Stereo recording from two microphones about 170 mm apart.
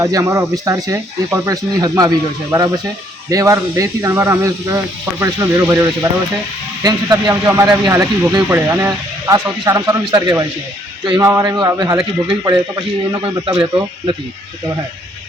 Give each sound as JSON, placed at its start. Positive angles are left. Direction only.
{"t": 0.0, "sound": "speech", "side_deg": -20}
{"t": 13.2, "sound": "speech", "side_deg": -30}